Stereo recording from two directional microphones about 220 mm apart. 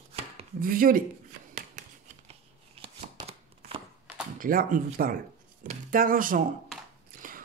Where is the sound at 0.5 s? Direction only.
40° right (ahead or behind).